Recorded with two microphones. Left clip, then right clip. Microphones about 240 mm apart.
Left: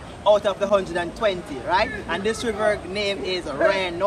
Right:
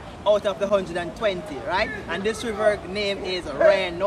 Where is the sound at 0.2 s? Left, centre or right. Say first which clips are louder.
Left 2 dB; centre.